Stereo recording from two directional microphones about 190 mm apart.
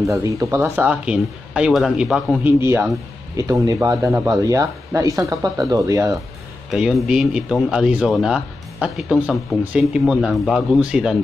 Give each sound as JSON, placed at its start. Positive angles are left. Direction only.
{"t": 0.1, "sound": "speech", "side_deg": -15}
{"t": 6.7, "sound": "speech", "side_deg": 0}